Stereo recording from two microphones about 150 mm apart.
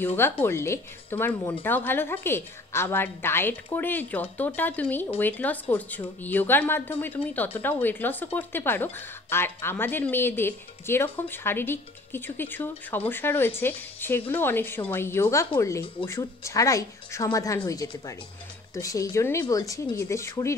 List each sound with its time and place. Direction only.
0.0 s speech: 15° left (ahead or behind)